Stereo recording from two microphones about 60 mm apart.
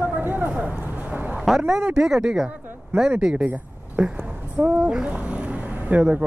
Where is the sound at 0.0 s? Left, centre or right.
Right.